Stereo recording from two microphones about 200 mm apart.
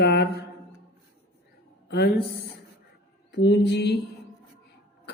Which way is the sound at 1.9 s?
55° left (ahead or behind).